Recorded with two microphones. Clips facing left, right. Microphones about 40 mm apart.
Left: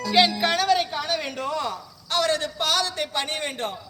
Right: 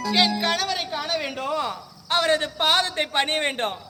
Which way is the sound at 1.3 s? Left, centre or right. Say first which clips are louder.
Right 1 dB; centre.